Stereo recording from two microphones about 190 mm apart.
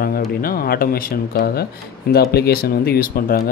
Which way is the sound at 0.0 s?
50° left (ahead or behind).